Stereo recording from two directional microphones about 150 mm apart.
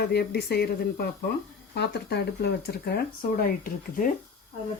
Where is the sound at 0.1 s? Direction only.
90° left; by 4.1 s 70° left (ahead or behind).